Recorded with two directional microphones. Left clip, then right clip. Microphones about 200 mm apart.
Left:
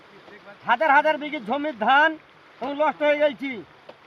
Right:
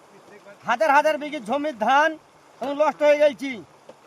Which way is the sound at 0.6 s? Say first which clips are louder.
Even; 25° right (ahead or behind).